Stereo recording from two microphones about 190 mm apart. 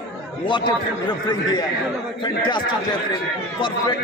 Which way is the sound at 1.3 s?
20° left (ahead or behind).